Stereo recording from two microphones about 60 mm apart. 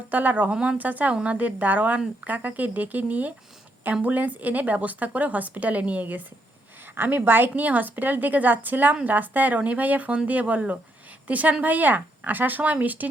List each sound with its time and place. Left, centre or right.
0.1 s a woman's voice: right